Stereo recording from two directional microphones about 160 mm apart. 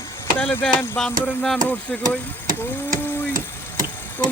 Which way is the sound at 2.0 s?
60° right (ahead or behind).